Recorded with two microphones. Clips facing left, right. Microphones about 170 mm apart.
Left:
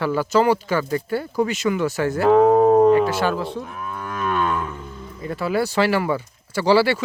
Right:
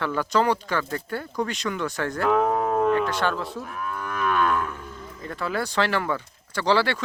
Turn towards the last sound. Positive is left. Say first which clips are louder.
# left 5 dB
turn(degrees=10)  # may be behind; listen again after turning